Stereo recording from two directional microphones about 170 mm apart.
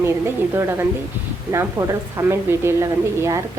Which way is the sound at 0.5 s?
15° right (ahead or behind).